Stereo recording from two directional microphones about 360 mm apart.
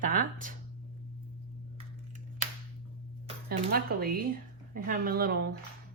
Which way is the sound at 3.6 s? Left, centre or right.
Right.